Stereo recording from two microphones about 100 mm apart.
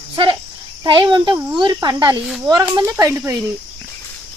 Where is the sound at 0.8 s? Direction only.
50° right (ahead or behind).